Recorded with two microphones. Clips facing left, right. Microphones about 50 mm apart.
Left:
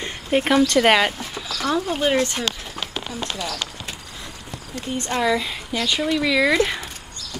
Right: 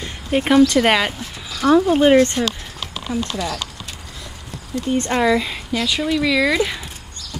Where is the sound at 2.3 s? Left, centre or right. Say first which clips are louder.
Right 4 dB; left.